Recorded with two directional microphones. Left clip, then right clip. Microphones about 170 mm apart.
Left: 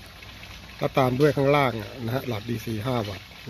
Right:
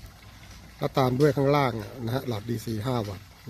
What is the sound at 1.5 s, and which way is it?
Speech, 15° right (ahead or behind).